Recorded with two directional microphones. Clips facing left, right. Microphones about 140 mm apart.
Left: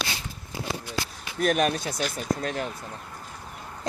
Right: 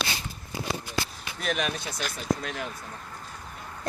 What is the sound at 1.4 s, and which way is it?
Speech, 45° left (ahead or behind).